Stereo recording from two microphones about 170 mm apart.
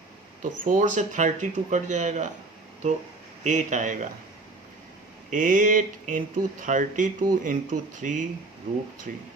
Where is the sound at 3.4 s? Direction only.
45° right (ahead or behind).